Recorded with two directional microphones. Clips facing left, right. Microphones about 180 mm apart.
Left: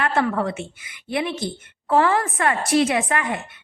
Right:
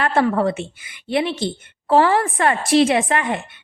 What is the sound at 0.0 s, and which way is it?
A woman's voice, 30° right (ahead or behind).